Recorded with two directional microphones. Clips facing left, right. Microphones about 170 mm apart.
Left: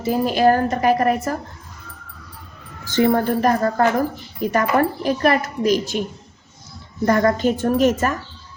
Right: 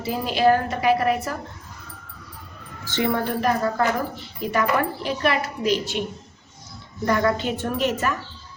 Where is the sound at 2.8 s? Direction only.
40° left (ahead or behind).